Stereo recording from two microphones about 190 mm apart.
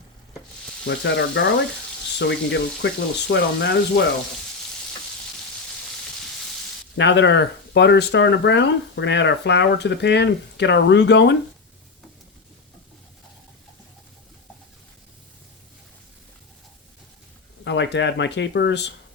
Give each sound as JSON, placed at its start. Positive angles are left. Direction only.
{"t": 0.9, "sound": "speech", "side_deg": 70}
{"t": 6.9, "sound": "speech", "side_deg": 65}
{"t": 17.6, "sound": "speech", "side_deg": 65}